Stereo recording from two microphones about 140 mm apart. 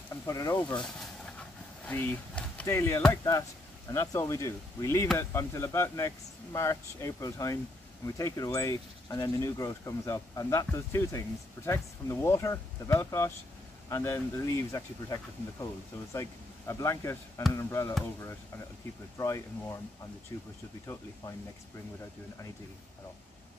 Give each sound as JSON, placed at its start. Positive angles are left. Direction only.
{"t": 0.3, "sound": "speech", "side_deg": 25}
{"t": 1.9, "sound": "speech", "side_deg": 15}
{"t": 19.1, "sound": "speech", "side_deg": 25}